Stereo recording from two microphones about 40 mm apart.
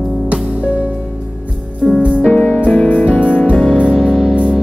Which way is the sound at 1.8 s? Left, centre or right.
Centre.